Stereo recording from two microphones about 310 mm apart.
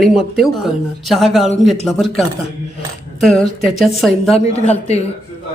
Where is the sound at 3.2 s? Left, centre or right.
Centre.